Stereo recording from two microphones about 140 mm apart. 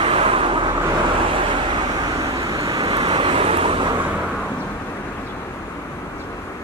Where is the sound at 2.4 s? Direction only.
25° right (ahead or behind).